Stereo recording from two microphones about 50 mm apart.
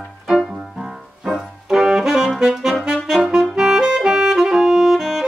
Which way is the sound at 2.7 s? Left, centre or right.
Centre.